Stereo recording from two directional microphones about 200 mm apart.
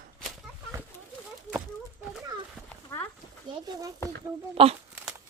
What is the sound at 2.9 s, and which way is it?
Horse, 15° left (ahead or behind).